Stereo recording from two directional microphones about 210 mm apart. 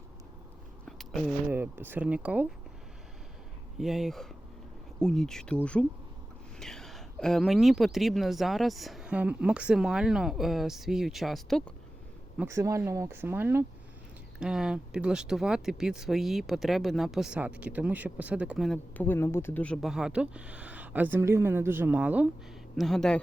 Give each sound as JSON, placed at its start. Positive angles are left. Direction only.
{"t": 0.9, "sound": "a sound", "side_deg": 0}
{"t": 1.5, "sound": "speech", "side_deg": -10}
{"t": 3.8, "sound": "speech", "side_deg": 0}
{"t": 6.6, "sound": "speech", "side_deg": 0}
{"t": 12.4, "sound": "speech", "side_deg": -15}